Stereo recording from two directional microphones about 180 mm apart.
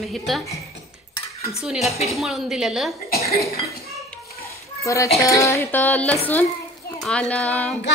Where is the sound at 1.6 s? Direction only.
5° right (ahead or behind).